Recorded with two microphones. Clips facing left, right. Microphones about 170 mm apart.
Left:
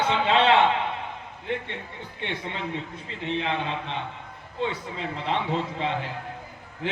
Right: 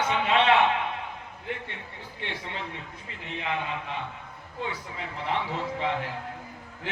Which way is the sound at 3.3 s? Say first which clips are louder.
Left 4 dB; 25° left (ahead or behind).